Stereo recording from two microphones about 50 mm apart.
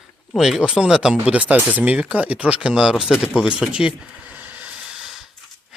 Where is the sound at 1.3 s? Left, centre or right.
Right.